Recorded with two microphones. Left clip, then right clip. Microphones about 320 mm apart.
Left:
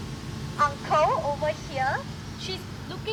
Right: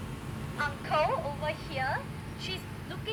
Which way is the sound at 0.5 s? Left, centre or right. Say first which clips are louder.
Left 7 dB; left.